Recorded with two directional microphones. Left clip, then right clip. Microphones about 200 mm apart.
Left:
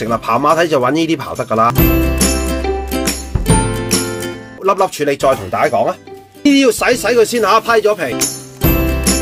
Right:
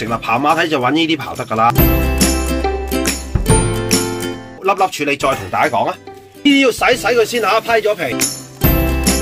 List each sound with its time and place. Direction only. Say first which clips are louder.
0.0 s speech: left 2 dB; 25° left (ahead or behind)
1.7 s music: left 1 dB; centre (ahead or behind)
4.8 s speech: left 2 dB; 25° left (ahead or behind)
8.1 s music: even; centre (ahead or behind)